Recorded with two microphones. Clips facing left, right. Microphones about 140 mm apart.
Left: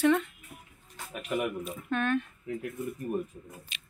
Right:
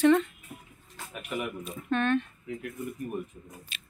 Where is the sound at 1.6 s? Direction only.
5° left (ahead or behind).